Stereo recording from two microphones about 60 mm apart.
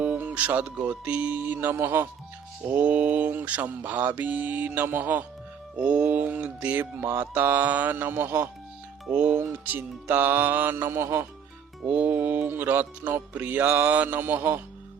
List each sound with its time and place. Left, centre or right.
0.0 s music: right
2.7 s mantra: right
5.7 s mantra: centre
7.2 s music: right
9.1 s mantra: right
9.5 s music: right
11.9 s mantra: right
12.5 s music: right